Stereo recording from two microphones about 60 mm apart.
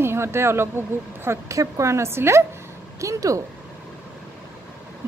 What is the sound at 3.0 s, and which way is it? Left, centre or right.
Speech, right.